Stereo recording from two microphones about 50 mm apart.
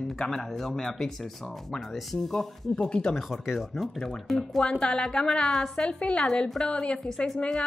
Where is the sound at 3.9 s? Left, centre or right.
Centre.